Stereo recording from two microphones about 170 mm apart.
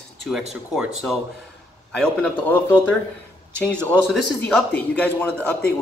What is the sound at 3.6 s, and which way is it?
A man's voice, 10° left (ahead or behind).